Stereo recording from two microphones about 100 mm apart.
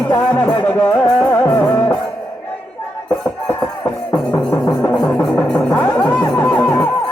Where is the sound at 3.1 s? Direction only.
25° left (ahead or behind).